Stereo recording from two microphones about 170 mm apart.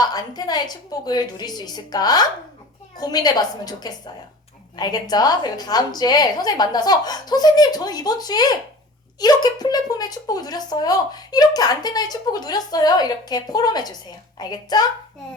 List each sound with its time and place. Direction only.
0.0 s a woman's voice: 25° left (ahead or behind)